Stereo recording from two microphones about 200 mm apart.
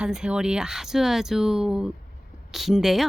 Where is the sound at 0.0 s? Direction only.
5° right (ahead or behind).